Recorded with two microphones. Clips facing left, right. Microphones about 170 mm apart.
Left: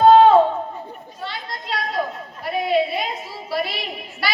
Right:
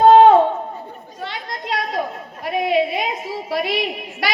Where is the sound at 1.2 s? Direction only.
55° right (ahead or behind).